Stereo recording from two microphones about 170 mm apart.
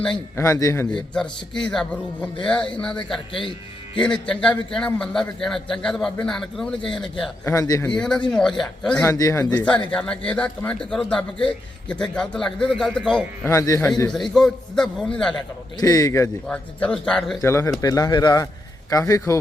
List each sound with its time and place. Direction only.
0.3 s speech: 15° left (ahead or behind)
1.1 s a man's voice: 5° left (ahead or behind)
4.0 s a man's voice: 5° left (ahead or behind)
7.4 s speech: 20° left (ahead or behind)
7.9 s a man's voice: 5° left (ahead or behind)
9.0 s a man's voice: 20° left (ahead or behind)
13.5 s speech: 15° left (ahead or behind)
14.1 s a man's voice: centre (ahead or behind)
15.8 s speech: 20° left (ahead or behind)
16.5 s a man's voice: 5° left (ahead or behind)
17.4 s speech: 15° left (ahead or behind)